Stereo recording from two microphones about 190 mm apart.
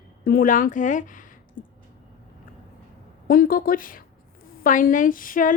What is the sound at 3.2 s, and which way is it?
A woman's voice, 50° left (ahead or behind).